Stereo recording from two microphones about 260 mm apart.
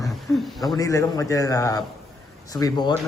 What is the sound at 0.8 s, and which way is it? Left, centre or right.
A man's voice, centre.